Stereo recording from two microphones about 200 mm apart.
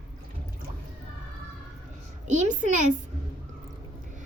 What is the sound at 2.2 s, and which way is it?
Speech, 40° right (ahead or behind).